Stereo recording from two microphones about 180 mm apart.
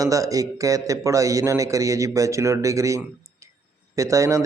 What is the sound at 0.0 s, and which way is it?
Speech, 20° right (ahead or behind).